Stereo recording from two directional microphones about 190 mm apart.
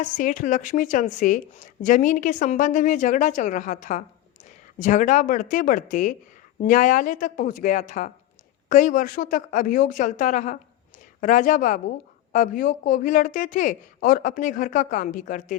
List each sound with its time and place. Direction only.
0.0 s a woman's voice: 45° left (ahead or behind)